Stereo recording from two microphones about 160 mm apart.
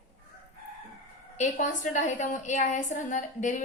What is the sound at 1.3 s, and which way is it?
A woman's voice, 50° left (ahead or behind).